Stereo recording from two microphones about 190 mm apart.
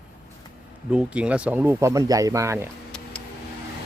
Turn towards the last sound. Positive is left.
turn(degrees=5)  # may be behind; listen again after turning